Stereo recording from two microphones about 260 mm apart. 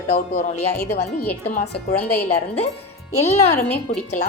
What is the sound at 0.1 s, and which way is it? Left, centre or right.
A woman's voice, left.